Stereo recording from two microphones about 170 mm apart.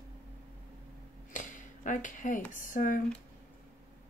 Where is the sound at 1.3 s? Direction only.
50° left (ahead or behind).